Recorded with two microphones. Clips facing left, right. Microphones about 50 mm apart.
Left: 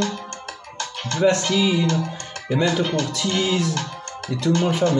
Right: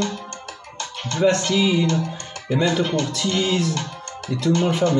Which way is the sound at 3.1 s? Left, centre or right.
Centre.